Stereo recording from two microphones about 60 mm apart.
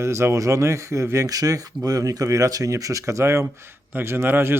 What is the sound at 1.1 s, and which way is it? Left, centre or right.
Speech, right.